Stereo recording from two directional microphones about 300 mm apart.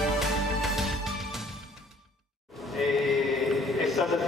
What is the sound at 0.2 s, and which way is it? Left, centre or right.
Music, centre.